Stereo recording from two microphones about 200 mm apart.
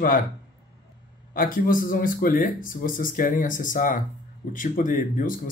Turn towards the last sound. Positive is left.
turn(degrees=40)  # may be behind; listen again after turning